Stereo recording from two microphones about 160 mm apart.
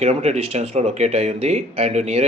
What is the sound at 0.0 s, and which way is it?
Speech, 40° right (ahead or behind).